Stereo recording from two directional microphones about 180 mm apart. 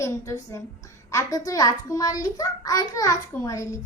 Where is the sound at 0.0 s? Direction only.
15° left (ahead or behind).